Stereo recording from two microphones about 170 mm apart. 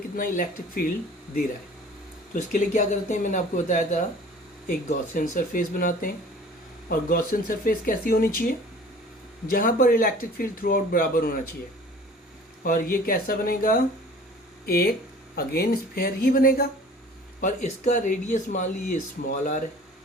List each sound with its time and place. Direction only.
0.2 s speech: 55° left (ahead or behind)
2.3 s speech: 50° left (ahead or behind)
12.6 s speech: 55° left (ahead or behind)
17.4 s speech: 45° left (ahead or behind)